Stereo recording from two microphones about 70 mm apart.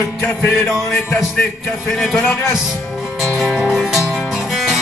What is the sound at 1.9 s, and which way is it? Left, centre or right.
Speech, centre.